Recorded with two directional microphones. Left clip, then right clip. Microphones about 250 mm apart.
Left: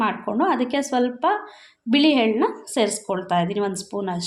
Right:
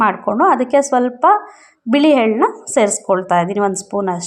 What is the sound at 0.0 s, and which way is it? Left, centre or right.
A woman's voice, right.